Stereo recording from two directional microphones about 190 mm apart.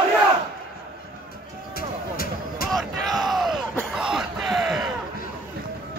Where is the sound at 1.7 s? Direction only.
50° left (ahead or behind).